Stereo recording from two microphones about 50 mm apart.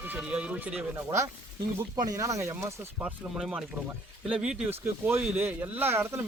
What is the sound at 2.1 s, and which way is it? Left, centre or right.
Speech, right.